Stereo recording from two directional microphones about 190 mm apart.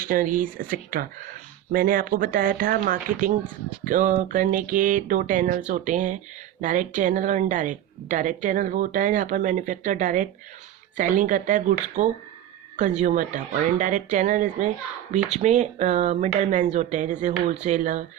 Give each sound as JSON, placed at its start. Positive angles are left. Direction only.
{"t": 0.0, "sound": "speech", "side_deg": -45}